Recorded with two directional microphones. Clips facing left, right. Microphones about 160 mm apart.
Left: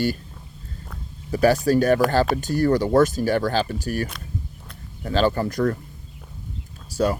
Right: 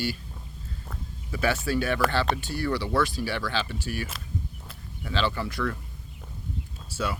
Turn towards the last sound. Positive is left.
turn(degrees=40)  # may be behind; listen again after turning